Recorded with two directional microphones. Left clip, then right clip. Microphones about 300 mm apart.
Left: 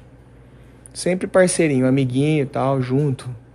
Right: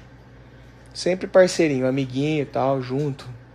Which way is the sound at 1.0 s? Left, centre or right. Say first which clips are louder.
Even; left.